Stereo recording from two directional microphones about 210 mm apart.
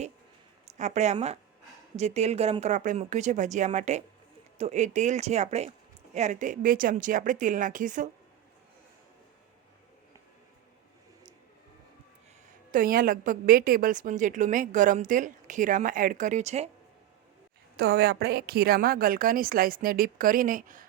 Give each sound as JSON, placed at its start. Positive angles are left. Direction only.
{"t": 0.8, "sound": "a woman's voice", "side_deg": -35}
{"t": 12.7, "sound": "a woman's voice", "side_deg": -40}
{"t": 17.7, "sound": "a woman's voice", "side_deg": -50}